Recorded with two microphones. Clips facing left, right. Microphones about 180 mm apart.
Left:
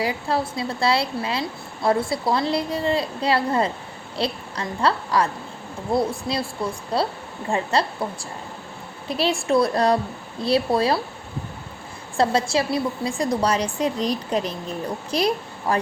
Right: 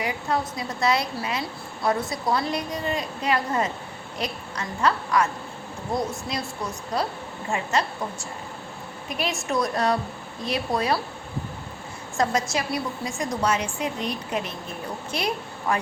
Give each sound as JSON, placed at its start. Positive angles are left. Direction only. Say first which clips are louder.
{"t": 0.0, "sound": "a woman's voice", "louder": "left 3 dB", "side_deg": 30}
{"t": 12.1, "sound": "a woman's voice", "louder": "left 4 dB", "side_deg": 30}